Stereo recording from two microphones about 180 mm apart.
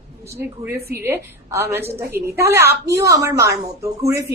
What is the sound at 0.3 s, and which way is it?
A woman's voice, 15° right (ahead or behind).